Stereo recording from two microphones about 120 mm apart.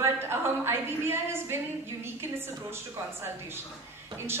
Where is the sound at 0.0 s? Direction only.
20° right (ahead or behind).